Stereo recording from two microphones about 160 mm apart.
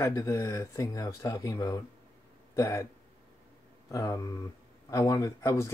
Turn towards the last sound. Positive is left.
turn(degrees=20)  # may be behind; listen again after turning